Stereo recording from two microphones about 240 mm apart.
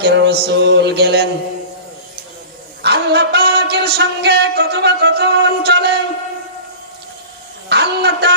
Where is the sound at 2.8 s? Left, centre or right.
Right.